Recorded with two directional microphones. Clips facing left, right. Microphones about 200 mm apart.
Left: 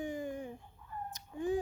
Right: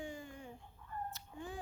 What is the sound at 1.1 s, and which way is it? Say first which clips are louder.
Fowl: left 12 dB; 15° left (ahead or behind).